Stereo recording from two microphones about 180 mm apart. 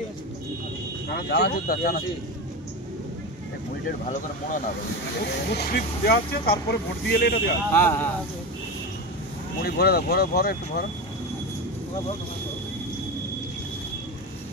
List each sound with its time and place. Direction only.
1.1 s speech: 65° left (ahead or behind)
5.2 s speech: 65° left (ahead or behind)
7.7 s speech: 10° left (ahead or behind)
9.6 s speech: 60° left (ahead or behind)